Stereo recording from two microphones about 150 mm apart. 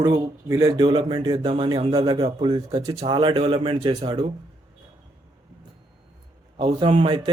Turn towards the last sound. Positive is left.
turn(degrees=-35)  # may be behind; listen again after turning